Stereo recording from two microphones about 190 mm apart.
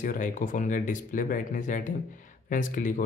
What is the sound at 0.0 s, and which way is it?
Speech, 45° left (ahead or behind).